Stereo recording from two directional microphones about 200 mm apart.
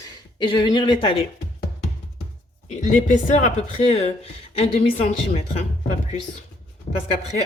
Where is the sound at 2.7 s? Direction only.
40° left (ahead or behind).